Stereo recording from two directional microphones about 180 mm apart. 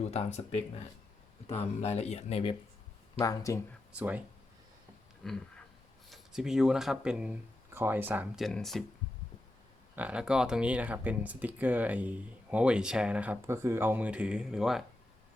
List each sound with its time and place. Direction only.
0.1 s speech: 35° left (ahead or behind)
1.8 s speech: 35° left (ahead or behind)
3.2 s speech: 20° left (ahead or behind)
3.9 s speech: 10° right (ahead or behind)
5.2 s a sound: centre (ahead or behind)
6.1 s speech: 5° right (ahead or behind)
8.4 s speech: centre (ahead or behind)
9.9 s speech: 10° right (ahead or behind)